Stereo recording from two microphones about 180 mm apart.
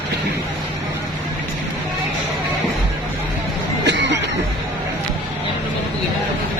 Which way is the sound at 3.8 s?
75° right (ahead or behind).